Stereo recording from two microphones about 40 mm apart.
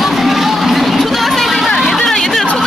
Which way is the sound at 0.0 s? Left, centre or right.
Centre.